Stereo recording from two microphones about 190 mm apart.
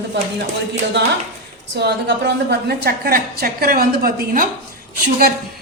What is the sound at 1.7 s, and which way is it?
Speech, 65° right (ahead or behind).